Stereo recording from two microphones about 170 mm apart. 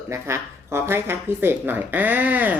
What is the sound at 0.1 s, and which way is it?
Speech, 15° right (ahead or behind).